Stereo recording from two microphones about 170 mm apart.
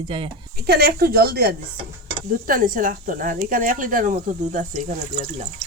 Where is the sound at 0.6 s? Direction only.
70° right (ahead or behind).